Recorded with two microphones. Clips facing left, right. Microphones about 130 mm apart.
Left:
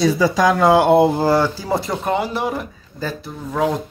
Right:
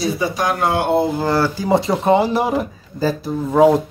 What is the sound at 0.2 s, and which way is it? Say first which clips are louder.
Speech: left 4 dB; 90° left.